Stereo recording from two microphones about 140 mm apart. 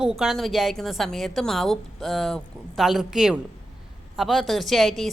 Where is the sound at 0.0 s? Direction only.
5° right (ahead or behind).